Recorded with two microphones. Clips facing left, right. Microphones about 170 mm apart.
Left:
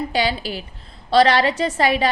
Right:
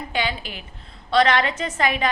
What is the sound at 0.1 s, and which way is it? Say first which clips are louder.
A woman's voice: left 5 dB; 35° left (ahead or behind).